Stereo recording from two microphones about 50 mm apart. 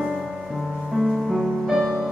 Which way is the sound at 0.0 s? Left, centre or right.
Centre.